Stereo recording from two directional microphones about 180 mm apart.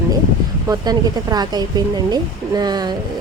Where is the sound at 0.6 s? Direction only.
20° right (ahead or behind).